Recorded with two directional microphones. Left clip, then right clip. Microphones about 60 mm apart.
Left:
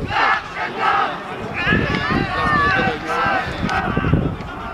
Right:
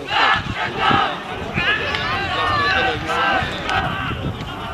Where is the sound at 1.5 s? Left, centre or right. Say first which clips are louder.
Even; centre.